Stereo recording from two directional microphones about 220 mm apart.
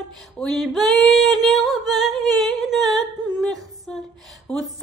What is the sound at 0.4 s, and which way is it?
Female singing, centre (ahead or behind).